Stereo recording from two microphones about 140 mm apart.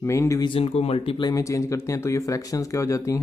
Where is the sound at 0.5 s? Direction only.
45° left (ahead or behind).